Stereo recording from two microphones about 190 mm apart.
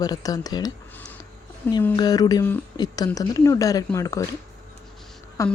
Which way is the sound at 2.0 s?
20° left (ahead or behind).